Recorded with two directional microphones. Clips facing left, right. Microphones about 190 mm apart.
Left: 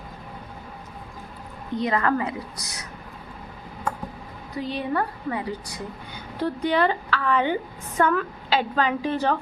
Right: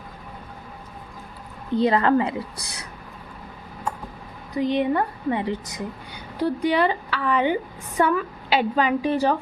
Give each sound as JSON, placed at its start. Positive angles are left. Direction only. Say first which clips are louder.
{"t": 1.7, "sound": "a woman's voice", "louder": "right 5 dB", "side_deg": -30}
{"t": 4.5, "sound": "a woman's voice", "louder": "right 5 dB", "side_deg": -15}
{"t": 6.4, "sound": "a woman's voice", "louder": "right 2 dB", "side_deg": -10}